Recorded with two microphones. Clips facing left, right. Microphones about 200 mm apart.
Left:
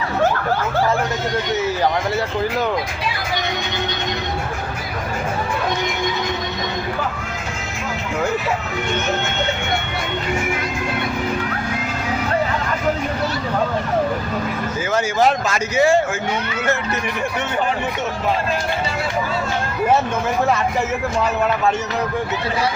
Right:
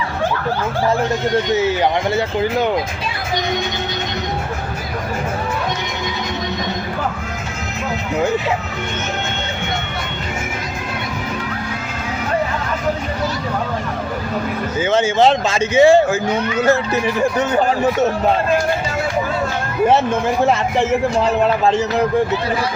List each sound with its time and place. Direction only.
1.6 s speech: 25° right (ahead or behind)
14.8 s speech: 25° right (ahead or behind)
20.4 s speech: 30° right (ahead or behind)